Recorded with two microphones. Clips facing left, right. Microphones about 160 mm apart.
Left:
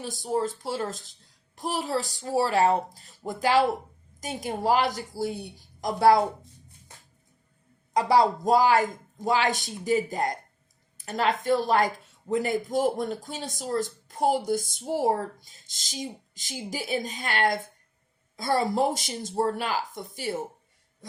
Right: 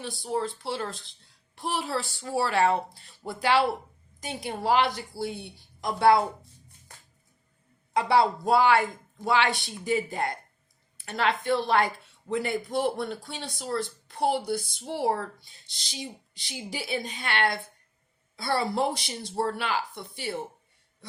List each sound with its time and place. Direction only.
0.0 s speech: 40° left (ahead or behind)
6.2 s a sound: 20° left (ahead or behind)
7.9 s speech: 40° left (ahead or behind)